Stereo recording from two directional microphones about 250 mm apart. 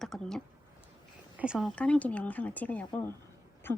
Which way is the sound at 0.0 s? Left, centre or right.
Centre.